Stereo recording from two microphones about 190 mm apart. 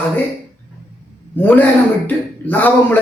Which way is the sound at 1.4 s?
10° left (ahead or behind).